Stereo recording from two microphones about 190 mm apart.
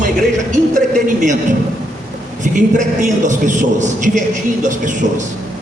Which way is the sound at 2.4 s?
40° right (ahead or behind).